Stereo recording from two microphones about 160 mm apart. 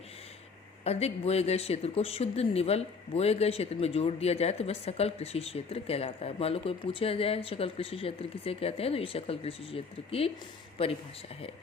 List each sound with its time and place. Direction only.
0.9 s speech: 40° left (ahead or behind)